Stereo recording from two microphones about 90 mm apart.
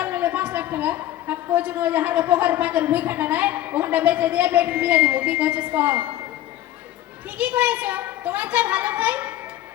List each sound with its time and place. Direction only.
0.0 s a woman's voice: 20° right (ahead or behind)
7.3 s a woman's voice: 15° right (ahead or behind)